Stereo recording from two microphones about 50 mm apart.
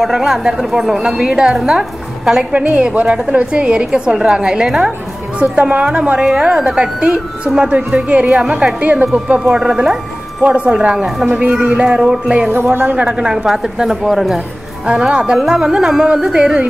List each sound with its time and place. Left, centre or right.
0.0 s a woman's voice: centre
2.5 s music: right
3.3 s a woman's voice: right
5.4 s music: right
6.1 s a woman's voice: centre
10.4 s music: right
11.0 s a man's voice: centre
11.2 s music: right
13.5 s a woman's voice: centre
14.9 s a woman's voice: centre